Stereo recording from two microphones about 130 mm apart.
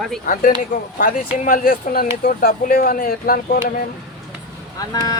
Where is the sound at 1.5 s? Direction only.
90° left.